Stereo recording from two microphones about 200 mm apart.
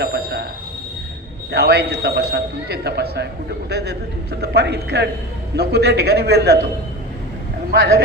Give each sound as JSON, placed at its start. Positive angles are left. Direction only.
{"t": 0.0, "sound": "a sound", "side_deg": -50}
{"t": 1.5, "sound": "a man's voice", "side_deg": -55}
{"t": 7.7, "sound": "a man's voice", "side_deg": -55}